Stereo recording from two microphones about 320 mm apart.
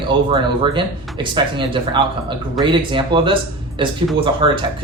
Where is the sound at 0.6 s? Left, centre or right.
Centre.